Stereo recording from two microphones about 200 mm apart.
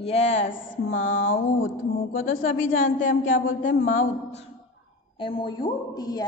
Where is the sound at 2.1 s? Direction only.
45° left (ahead or behind).